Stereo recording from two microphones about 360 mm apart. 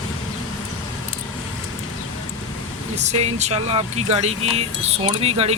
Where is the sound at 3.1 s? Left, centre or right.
Centre.